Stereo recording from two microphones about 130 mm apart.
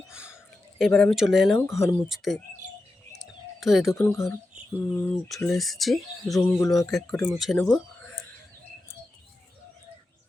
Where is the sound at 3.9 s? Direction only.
20° left (ahead or behind).